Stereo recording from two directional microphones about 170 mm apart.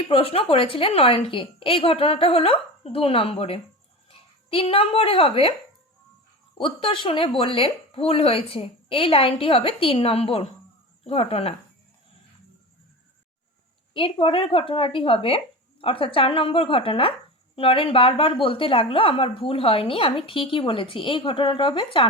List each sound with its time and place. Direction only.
0.1 s speech: 35° left (ahead or behind)
6.6 s speech: 30° left (ahead or behind)
13.9 s speech: 30° left (ahead or behind)